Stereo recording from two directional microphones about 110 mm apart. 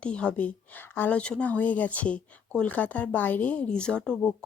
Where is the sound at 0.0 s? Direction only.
10° left (ahead or behind).